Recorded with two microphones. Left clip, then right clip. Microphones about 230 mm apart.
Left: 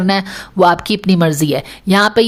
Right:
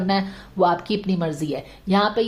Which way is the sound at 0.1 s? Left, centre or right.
Left.